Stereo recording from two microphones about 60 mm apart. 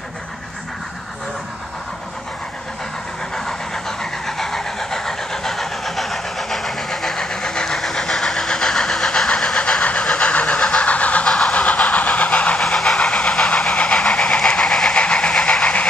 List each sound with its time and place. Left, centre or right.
3.3 s vehicle: centre
9.6 s vehicle: centre
11.2 s vehicle: centre
12.6 s vehicle: centre